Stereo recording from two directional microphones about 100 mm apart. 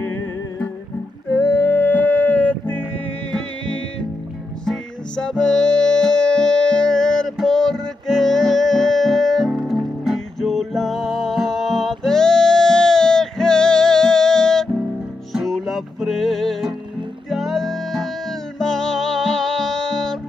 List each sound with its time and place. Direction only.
0.0 s music: 20° left (ahead or behind); by 20.2 s 5° left (ahead or behind)